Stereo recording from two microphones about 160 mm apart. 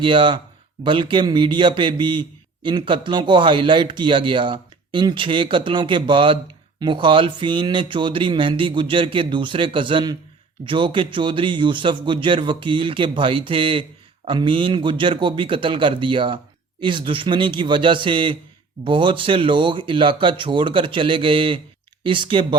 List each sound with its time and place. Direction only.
0.0 s a man's voice: 30° right (ahead or behind)